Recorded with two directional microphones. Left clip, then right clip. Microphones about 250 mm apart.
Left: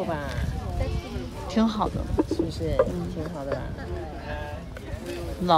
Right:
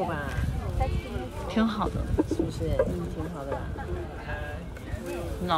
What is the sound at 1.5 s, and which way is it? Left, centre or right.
Speech, centre.